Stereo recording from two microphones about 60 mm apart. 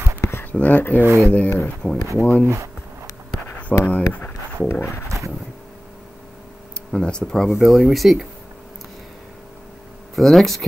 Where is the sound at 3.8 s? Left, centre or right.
Left.